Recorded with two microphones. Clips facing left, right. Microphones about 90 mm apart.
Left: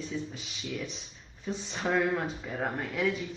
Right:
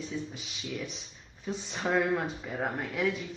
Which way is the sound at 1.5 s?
Centre (ahead or behind).